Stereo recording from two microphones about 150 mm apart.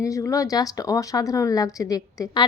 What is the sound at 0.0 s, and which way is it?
Speech, 20° left (ahead or behind).